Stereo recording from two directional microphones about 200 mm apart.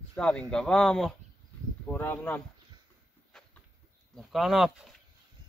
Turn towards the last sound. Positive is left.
turn(degrees=0)  # may be behind; listen again after turning